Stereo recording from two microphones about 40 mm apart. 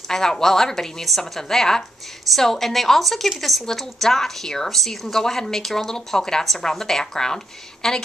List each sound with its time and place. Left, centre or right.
0.1 s a woman's voice: centre